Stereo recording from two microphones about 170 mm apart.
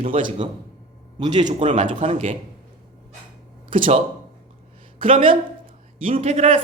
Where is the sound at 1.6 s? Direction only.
30° right (ahead or behind).